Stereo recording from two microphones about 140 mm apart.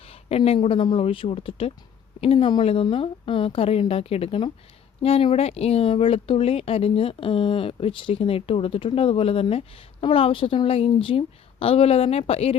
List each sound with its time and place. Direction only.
0.0 s speech: 45° left (ahead or behind)